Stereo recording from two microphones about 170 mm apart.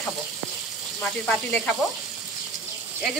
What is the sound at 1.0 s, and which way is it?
Speech, 5° left (ahead or behind).